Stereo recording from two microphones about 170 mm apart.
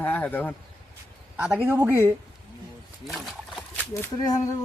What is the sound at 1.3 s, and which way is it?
Speech, 5° right (ahead or behind).